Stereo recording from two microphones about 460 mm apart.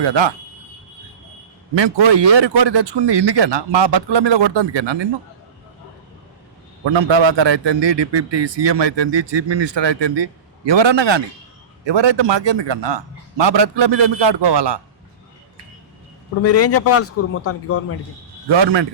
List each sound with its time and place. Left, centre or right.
0.0 s a man's voice: right
1.7 s a man's voice: right
6.8 s a man's voice: right
16.4 s a man's voice: left
18.4 s a man's voice: right